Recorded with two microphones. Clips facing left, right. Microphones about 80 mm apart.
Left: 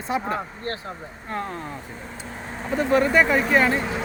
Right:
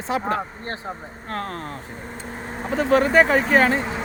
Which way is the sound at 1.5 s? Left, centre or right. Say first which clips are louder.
Right 1 dB; right.